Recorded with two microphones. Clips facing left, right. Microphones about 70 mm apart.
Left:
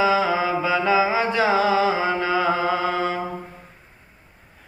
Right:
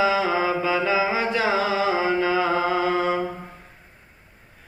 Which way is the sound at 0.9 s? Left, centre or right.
Left.